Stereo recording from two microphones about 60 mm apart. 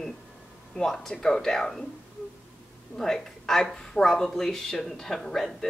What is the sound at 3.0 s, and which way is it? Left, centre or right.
Speech, centre.